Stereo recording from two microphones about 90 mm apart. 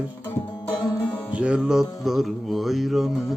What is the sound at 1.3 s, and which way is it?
Music, 10° right (ahead or behind).